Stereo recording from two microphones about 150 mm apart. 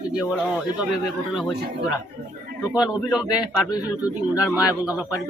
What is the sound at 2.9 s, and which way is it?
Speech, 5° right (ahead or behind).